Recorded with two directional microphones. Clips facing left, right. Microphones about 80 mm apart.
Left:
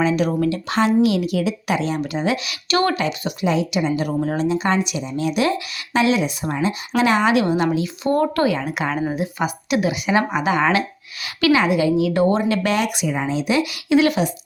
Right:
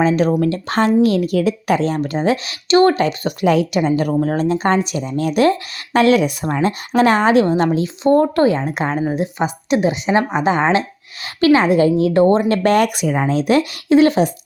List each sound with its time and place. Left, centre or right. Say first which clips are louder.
0.0 s speech: right 4 dB; right
3.4 s speech: right 5 dB; right